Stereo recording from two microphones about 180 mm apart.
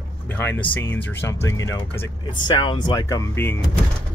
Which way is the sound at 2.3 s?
25° left (ahead or behind).